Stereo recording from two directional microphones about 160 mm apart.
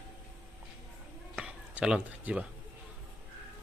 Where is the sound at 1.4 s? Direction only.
5° right (ahead or behind).